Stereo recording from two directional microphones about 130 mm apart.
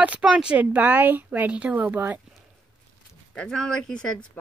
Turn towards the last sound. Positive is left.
turn(degrees=5)  # may be behind; listen again after turning